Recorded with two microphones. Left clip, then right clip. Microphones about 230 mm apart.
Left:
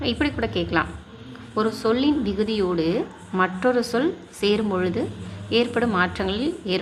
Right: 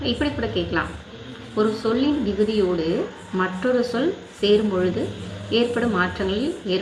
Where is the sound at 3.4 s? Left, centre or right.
Left.